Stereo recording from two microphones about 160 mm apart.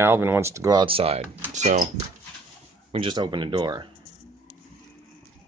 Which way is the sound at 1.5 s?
45° right (ahead or behind).